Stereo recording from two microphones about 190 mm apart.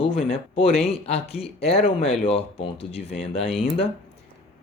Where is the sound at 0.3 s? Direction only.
35° left (ahead or behind).